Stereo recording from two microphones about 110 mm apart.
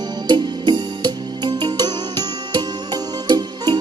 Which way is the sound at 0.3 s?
40° right (ahead or behind).